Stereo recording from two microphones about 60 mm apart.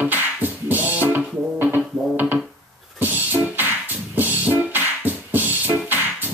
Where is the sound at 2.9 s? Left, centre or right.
Right.